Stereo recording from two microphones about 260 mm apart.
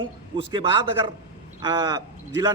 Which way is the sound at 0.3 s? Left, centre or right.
Centre.